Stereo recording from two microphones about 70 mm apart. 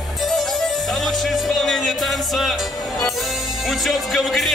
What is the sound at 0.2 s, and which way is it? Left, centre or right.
Music, centre.